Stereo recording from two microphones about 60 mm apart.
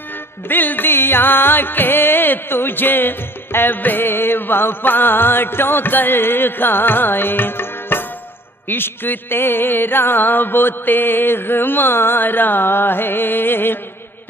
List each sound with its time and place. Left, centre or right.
0.5 s music: left